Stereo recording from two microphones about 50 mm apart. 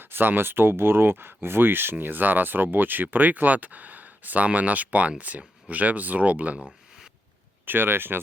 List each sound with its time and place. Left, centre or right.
0.0 s speech: right
7.6 s speech: right